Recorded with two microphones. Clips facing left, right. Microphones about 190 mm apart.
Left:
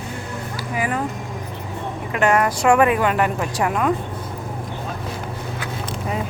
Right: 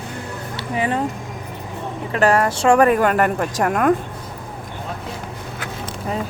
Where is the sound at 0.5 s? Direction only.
30° right (ahead or behind).